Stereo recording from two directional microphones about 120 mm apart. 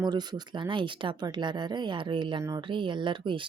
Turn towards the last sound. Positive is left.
turn(degrees=-45)  # may be behind; listen again after turning